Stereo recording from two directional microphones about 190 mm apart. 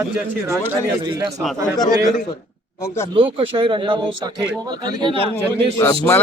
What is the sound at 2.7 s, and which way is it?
Speech, 15° left (ahead or behind).